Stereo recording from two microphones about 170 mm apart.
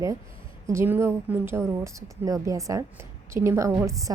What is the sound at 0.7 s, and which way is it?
A woman's voice, 15° right (ahead or behind).